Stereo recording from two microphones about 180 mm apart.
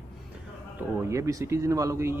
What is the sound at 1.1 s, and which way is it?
Speech, 15° right (ahead or behind).